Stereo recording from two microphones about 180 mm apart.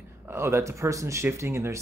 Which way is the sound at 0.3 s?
15° right (ahead or behind).